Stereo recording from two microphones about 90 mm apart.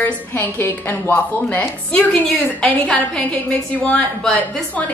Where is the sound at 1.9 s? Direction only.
10° left (ahead or behind).